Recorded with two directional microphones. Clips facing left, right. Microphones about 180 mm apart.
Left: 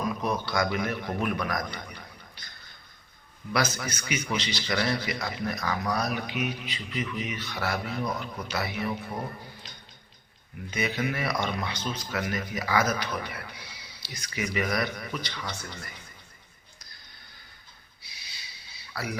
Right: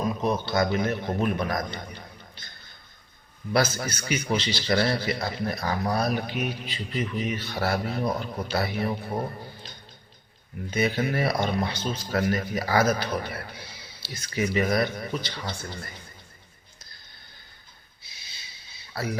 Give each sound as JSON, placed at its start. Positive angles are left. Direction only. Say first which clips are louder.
{"t": 0.0, "sound": "a man's voice", "louder": "right 3 dB", "side_deg": -25}
{"t": 3.5, "sound": "speech", "louder": "right 4 dB", "side_deg": -30}
{"t": 6.7, "sound": "speech", "louder": "right 3 dB", "side_deg": -45}
{"t": 10.7, "sound": "speech", "louder": "right 4 dB", "side_deg": -30}
{"t": 18.9, "sound": "speech", "louder": "right 4 dB", "side_deg": -25}